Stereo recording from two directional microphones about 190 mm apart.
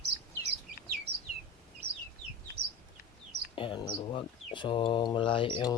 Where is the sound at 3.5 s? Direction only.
25° left (ahead or behind).